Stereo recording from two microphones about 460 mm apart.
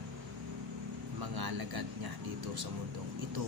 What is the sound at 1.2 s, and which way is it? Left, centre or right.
Speech, right.